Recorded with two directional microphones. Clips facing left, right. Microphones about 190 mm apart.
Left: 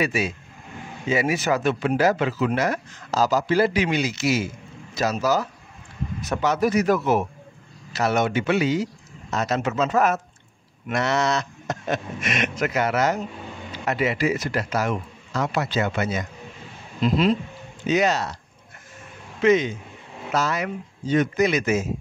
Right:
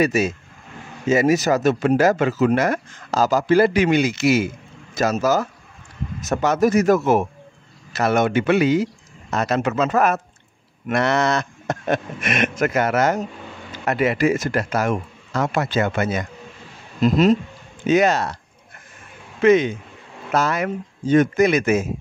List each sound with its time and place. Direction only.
0.0 s a man's voice: 40° right (ahead or behind)
19.4 s a man's voice: 55° right (ahead or behind)